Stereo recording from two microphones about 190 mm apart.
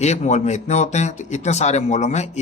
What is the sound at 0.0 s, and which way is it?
A man's voice, 35° left (ahead or behind).